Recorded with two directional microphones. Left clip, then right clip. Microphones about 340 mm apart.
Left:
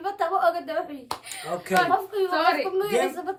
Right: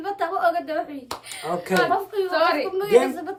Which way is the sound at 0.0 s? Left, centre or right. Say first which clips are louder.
Even; centre.